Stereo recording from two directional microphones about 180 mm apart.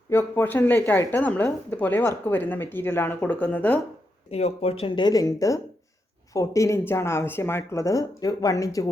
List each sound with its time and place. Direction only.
0.1 s speech: 15° left (ahead or behind)
4.3 s speech: 35° left (ahead or behind); by 8.9 s 20° left (ahead or behind)